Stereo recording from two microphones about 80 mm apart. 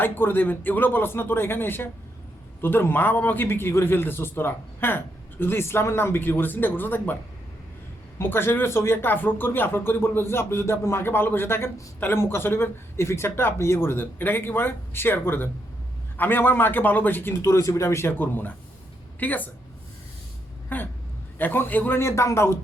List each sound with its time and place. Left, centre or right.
0.0 s a man's voice: left
8.2 s a man's voice: left
20.7 s a man's voice: left